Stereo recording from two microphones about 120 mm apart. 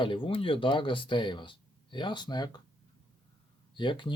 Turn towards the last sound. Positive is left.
turn(degrees=40)  # may be behind; listen again after turning